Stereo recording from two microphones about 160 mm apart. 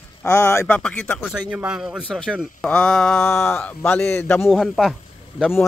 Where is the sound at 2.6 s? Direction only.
5° left (ahead or behind).